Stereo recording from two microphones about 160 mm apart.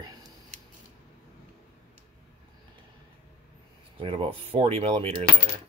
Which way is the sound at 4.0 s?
35° right (ahead or behind).